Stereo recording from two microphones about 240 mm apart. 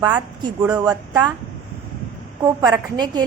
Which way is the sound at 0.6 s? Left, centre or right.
Centre.